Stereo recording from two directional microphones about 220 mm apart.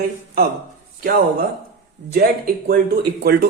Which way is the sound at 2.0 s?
50° right (ahead or behind).